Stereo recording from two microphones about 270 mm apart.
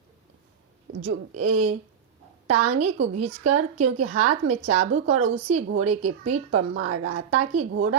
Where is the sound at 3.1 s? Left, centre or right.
Right.